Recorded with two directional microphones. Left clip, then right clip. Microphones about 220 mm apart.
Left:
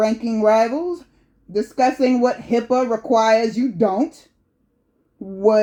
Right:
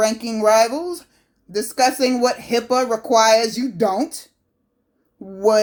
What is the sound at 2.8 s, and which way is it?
Speech, 35° right (ahead or behind).